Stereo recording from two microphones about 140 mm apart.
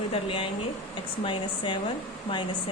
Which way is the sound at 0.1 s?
40° left (ahead or behind).